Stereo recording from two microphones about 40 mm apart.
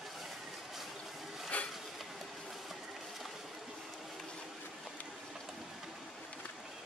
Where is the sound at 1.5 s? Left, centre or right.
Left.